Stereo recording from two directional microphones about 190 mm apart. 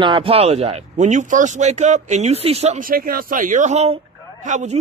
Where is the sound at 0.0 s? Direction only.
30° right (ahead or behind).